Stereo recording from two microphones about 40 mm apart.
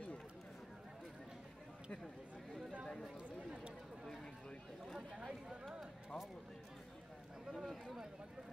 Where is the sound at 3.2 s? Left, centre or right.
Right.